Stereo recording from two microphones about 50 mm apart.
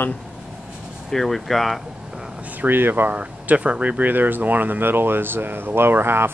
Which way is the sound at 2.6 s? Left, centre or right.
Right.